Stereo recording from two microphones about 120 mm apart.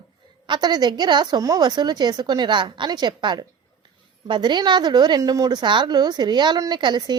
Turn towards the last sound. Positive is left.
turn(degrees=-40)  # may be behind; listen again after turning